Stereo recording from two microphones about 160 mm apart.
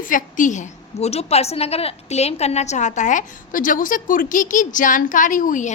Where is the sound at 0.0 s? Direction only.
55° left (ahead or behind).